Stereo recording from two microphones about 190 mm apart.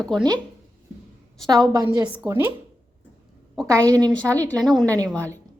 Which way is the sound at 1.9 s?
25° right (ahead or behind).